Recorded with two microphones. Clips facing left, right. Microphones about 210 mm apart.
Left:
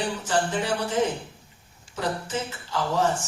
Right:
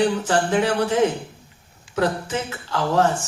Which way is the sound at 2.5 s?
65° right (ahead or behind).